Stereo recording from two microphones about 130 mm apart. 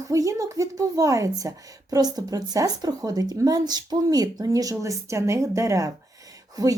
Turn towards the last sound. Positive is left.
turn(degrees=-25)  # may be behind; listen again after turning